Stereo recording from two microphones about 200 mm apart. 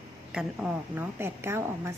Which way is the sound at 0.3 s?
5° right (ahead or behind).